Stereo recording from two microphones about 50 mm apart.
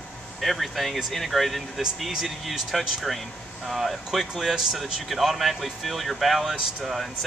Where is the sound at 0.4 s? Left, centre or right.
Centre.